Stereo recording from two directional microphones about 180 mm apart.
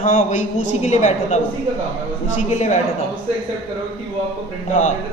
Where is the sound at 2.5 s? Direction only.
40° left (ahead or behind).